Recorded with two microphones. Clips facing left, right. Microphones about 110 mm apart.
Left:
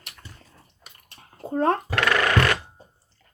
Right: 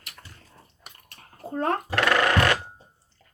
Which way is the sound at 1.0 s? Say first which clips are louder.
Left 3 dB; 25° left (ahead or behind).